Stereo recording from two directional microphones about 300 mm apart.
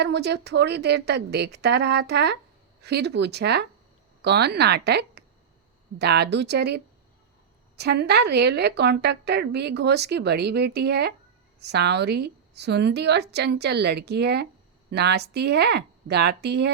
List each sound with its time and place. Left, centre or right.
0.0 s speech: right